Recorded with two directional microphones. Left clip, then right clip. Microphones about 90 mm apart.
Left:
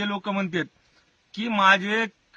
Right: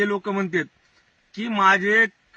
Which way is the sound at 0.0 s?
5° left (ahead or behind).